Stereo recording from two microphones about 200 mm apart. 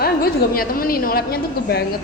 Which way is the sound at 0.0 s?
50° left (ahead or behind).